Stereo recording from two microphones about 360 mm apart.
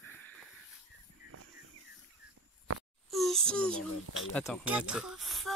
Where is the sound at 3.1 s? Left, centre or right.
Centre.